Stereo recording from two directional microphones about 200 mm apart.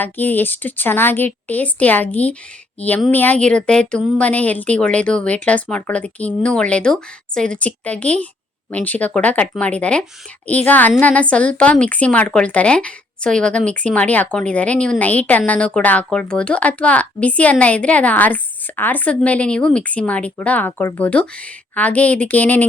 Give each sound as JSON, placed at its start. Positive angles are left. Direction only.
{"t": 0.0, "sound": "speech", "side_deg": 10}